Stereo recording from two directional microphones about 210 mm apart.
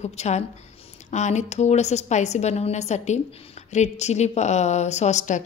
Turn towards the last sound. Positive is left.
turn(degrees=35)  # may be behind; listen again after turning